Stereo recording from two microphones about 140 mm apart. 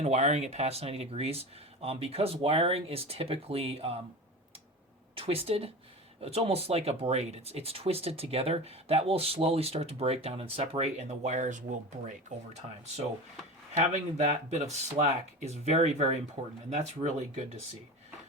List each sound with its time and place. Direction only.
0.0 s speech: 55° right (ahead or behind)
5.1 s speech: 45° right (ahead or behind); by 12.1 s 65° right (ahead or behind)
14.5 s speech: 50° right (ahead or behind)